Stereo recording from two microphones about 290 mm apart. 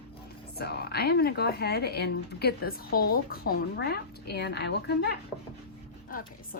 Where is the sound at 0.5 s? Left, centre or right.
Left.